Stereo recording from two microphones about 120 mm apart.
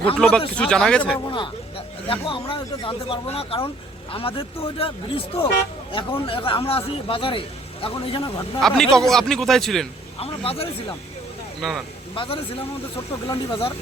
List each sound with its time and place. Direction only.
0.2 s speech: 10° left (ahead or behind)
1.2 s a man's voice: 40° left (ahead or behind)
8.6 s speech: 5° left (ahead or behind)
10.2 s a man's voice: 55° left (ahead or behind)
11.6 s speech: 5° right (ahead or behind)
12.1 s a man's voice: 45° left (ahead or behind)